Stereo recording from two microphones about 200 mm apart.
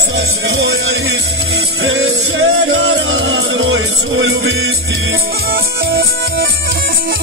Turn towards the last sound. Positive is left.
turn(degrees=-50)  # may be behind; listen again after turning